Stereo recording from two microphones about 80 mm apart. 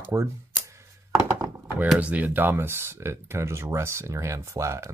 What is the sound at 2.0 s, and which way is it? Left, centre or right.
Speech, centre.